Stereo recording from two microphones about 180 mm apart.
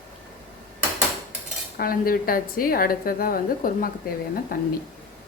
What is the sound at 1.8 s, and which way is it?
A woman's voice, 55° left (ahead or behind).